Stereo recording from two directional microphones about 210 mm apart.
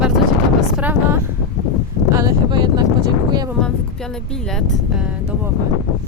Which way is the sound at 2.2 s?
20° right (ahead or behind).